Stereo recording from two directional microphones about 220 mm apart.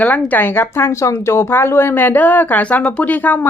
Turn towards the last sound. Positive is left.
turn(degrees=10)  # may be behind; listen again after turning